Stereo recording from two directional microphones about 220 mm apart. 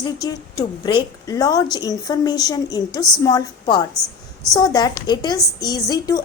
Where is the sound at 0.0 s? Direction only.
15° left (ahead or behind).